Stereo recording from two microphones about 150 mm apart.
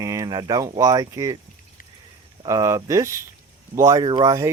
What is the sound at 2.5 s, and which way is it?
Speech, 20° right (ahead or behind).